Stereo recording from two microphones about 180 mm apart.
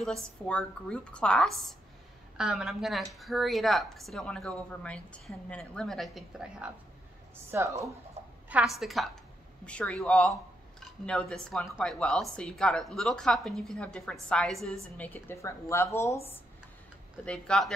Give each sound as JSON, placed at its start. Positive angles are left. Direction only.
{"t": 0.0, "sound": "a woman's voice", "side_deg": 5}
{"t": 7.5, "sound": "speech", "side_deg": -15}
{"t": 8.5, "sound": "a woman's voice", "side_deg": -5}
{"t": 17.2, "sound": "a woman's voice", "side_deg": 5}